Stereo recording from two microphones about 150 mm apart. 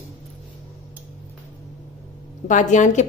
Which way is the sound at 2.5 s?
55° left (ahead or behind).